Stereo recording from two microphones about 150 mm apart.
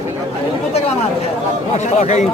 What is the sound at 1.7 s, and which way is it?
Speech, 50° left (ahead or behind).